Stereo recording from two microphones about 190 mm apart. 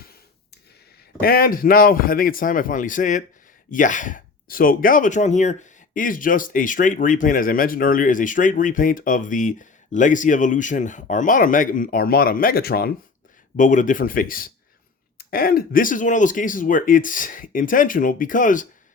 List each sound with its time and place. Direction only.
1.2 s speech: 50° left (ahead or behind)
13.6 s speech: 45° left (ahead or behind)